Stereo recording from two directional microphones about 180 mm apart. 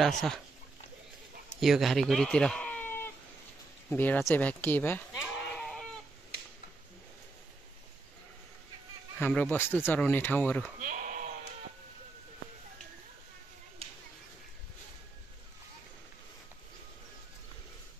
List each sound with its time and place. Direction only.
1.6 s speech: centre (ahead or behind)
5.1 s sheep: centre (ahead or behind)
9.2 s speech: 10° left (ahead or behind)
10.8 s bleat: 45° right (ahead or behind)
13.8 s a sound: 30° right (ahead or behind)